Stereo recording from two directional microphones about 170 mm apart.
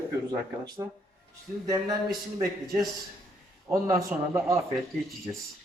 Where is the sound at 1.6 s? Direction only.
20° right (ahead or behind).